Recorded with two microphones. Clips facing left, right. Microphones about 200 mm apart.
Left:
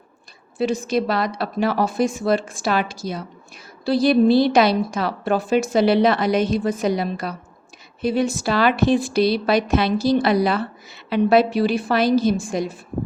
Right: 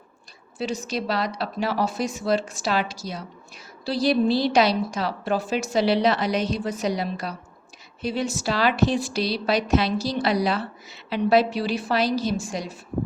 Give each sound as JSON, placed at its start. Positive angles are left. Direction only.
{"t": 0.6, "sound": "a woman's voice", "side_deg": 55}